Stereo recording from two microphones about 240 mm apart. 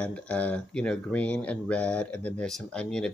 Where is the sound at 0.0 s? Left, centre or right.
Centre.